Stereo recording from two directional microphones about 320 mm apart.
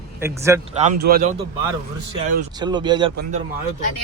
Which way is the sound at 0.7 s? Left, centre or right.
Right.